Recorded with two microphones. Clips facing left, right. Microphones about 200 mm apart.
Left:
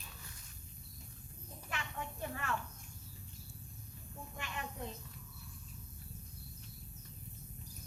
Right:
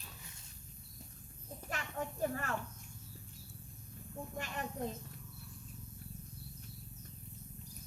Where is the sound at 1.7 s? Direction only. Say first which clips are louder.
Right 3 dB; 40° right (ahead or behind).